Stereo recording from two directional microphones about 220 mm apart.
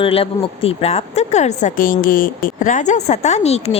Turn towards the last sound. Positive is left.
turn(degrees=30)  # may be behind; listen again after turning